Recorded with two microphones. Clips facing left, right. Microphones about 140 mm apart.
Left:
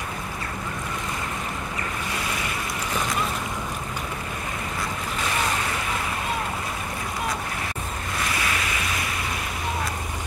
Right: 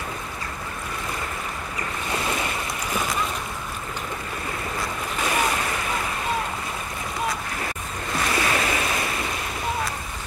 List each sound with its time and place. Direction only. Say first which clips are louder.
8.4 s waves: right 4 dB; 35° right (ahead or behind)